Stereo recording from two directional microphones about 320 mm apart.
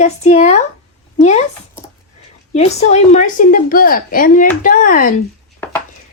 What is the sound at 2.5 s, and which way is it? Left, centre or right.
A woman's voice, left.